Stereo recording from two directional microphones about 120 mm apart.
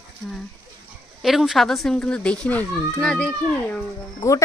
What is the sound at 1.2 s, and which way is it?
A child's voice, centre (ahead or behind).